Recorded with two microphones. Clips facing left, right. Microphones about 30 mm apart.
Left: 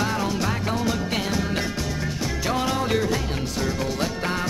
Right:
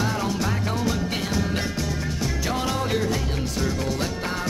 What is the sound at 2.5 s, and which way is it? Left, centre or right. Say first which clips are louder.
Music: left 3 dB; centre.